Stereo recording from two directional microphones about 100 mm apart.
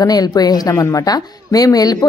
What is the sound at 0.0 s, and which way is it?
A woman's voice, 40° left (ahead or behind).